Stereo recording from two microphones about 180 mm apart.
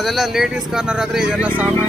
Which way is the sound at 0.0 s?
Centre (ahead or behind).